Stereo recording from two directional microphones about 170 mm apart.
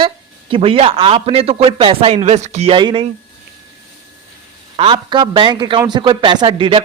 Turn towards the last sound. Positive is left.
turn(degrees=-30)  # may be behind; listen again after turning